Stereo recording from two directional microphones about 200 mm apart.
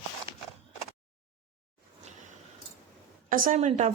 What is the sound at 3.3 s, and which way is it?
Speech, 40° right (ahead or behind).